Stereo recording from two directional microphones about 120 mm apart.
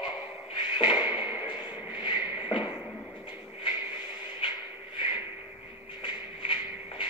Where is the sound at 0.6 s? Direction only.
35° left (ahead or behind).